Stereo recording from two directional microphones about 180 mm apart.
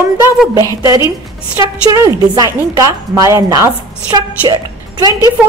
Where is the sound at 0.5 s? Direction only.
20° right (ahead or behind).